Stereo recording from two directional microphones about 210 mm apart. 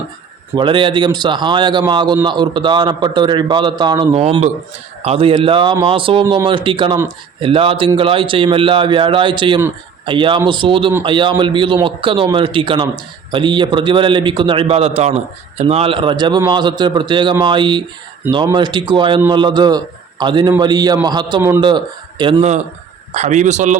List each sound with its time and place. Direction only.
0.5 s a man's voice: 25° right (ahead or behind)